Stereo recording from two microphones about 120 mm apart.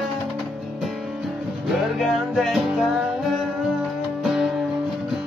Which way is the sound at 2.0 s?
Centre (ahead or behind).